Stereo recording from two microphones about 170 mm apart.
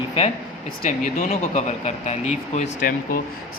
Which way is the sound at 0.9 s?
40° left (ahead or behind).